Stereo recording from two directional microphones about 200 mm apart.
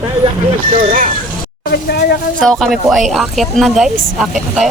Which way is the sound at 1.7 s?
55° left (ahead or behind).